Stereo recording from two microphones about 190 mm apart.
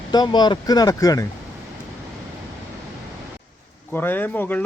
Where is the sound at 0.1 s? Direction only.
20° left (ahead or behind).